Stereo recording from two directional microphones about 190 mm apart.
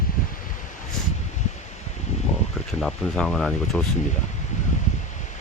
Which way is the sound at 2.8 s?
5° left (ahead or behind).